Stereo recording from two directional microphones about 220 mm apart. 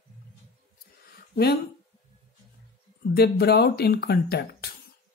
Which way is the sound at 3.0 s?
45° left (ahead or behind).